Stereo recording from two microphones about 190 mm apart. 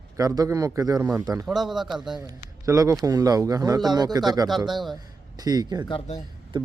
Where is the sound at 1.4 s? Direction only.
Centre (ahead or behind).